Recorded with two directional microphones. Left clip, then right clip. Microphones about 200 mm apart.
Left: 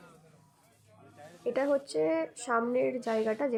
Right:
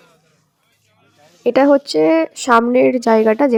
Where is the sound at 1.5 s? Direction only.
50° right (ahead or behind).